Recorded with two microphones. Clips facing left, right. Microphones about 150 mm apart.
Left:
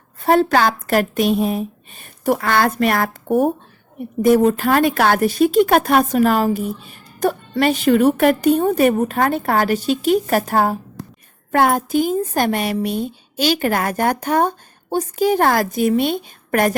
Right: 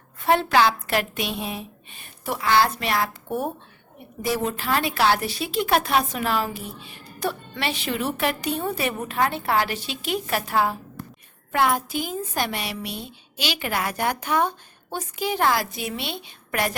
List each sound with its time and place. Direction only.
0.2 s speech: 40° left (ahead or behind)
11.0 s a sound: 90° left
11.5 s speech: 45° left (ahead or behind)